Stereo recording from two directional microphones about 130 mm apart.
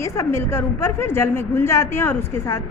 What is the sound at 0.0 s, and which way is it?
A woman's voice, 20° left (ahead or behind).